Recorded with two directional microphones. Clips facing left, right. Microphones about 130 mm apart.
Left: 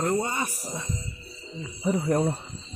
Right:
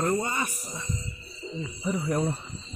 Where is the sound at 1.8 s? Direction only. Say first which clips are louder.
Left 4 dB; 40° left (ahead or behind).